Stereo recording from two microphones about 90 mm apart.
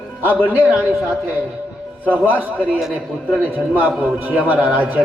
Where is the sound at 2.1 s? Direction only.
20° right (ahead or behind).